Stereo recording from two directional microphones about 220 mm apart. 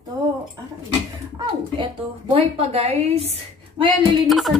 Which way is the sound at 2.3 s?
25° right (ahead or behind).